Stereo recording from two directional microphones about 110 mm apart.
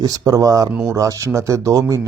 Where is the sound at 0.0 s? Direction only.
35° right (ahead or behind).